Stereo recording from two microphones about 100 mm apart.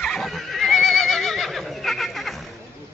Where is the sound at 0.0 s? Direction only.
5° left (ahead or behind).